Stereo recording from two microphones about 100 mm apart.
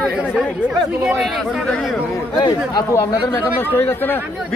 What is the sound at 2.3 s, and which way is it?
Speech, 45° left (ahead or behind).